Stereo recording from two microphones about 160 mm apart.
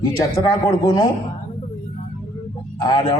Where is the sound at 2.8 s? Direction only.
35° left (ahead or behind).